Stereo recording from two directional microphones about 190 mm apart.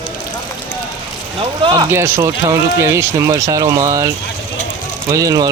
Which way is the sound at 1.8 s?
15° right (ahead or behind).